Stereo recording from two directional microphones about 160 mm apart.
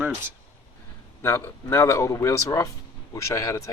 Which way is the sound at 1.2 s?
15° left (ahead or behind).